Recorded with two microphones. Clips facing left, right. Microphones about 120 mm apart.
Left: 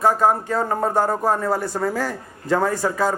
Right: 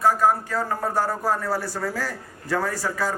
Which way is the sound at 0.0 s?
25° left (ahead or behind).